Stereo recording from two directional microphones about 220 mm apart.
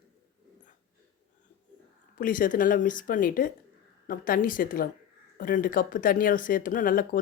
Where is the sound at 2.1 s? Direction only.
40° left (ahead or behind).